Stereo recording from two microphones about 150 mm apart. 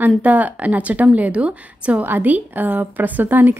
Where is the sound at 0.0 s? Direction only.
10° right (ahead or behind).